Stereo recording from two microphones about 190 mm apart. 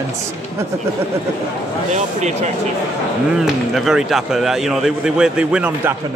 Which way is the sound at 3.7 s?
Centre (ahead or behind).